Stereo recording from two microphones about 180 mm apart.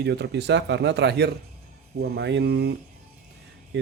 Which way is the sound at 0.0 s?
70° right (ahead or behind).